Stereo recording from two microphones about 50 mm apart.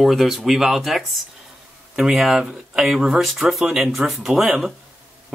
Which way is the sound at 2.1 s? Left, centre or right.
Centre.